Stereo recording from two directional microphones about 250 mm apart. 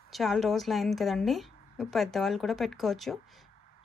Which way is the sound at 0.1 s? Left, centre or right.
Centre.